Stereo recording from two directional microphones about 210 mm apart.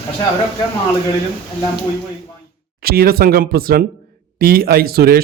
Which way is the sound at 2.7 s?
45° right (ahead or behind).